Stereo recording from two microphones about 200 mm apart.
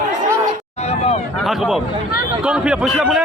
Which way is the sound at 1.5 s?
Centre (ahead or behind).